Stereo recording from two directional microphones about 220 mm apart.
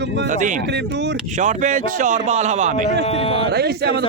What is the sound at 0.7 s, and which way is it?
Speech, 50° right (ahead or behind).